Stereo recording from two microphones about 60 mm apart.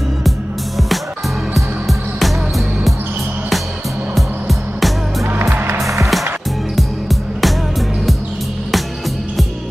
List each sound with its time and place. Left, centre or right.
1.5 s music: centre
4.1 s music: centre
5.2 s music: right
6.8 s music: centre